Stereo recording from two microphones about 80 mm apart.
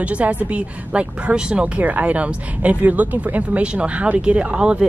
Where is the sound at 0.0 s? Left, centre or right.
Centre.